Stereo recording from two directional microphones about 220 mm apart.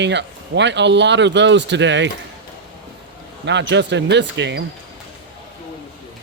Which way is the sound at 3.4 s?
55° right (ahead or behind).